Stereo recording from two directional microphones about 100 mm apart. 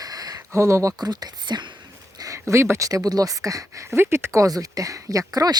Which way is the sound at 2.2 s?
30° right (ahead or behind).